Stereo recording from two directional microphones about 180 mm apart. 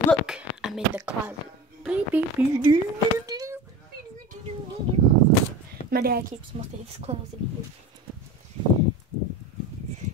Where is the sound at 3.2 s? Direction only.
20° right (ahead or behind).